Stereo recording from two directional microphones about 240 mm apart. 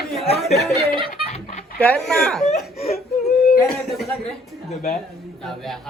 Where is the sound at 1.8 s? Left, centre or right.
Centre.